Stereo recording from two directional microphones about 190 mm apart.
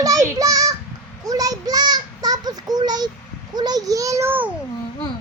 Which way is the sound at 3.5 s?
20° right (ahead or behind).